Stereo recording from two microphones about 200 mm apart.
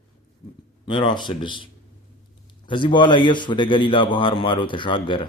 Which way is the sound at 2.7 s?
25° left (ahead or behind).